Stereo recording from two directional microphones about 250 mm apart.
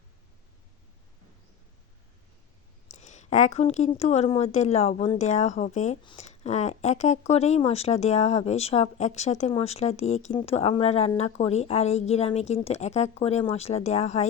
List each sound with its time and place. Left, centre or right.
2.9 s a woman's voice: left